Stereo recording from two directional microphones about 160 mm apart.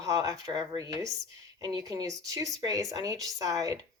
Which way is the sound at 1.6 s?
25° right (ahead or behind).